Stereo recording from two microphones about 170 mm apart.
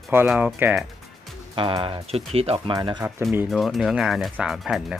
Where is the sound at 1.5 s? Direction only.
30° right (ahead or behind).